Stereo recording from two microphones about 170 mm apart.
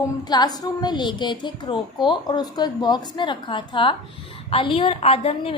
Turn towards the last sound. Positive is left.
turn(degrees=35)  # may be behind; listen again after turning